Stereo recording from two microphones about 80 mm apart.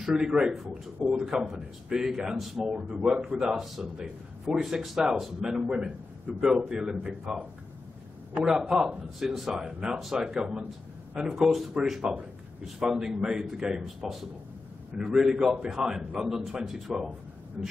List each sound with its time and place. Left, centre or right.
0.0 s a man's voice: centre
8.5 s a man's voice: centre
17.6 s a man's voice: centre